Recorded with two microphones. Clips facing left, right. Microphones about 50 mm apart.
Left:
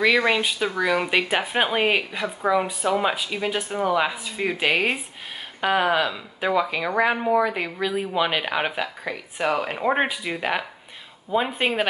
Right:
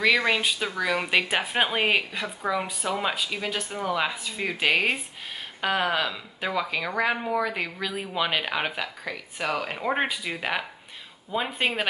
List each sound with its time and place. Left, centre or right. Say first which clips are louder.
0.0 s speech: left 3 dB; centre